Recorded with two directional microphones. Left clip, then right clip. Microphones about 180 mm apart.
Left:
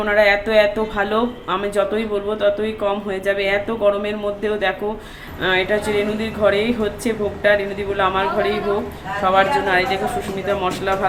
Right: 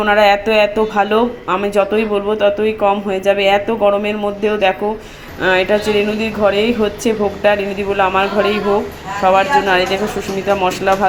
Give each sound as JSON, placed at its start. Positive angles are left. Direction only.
{"t": 0.0, "sound": "speech", "side_deg": -10}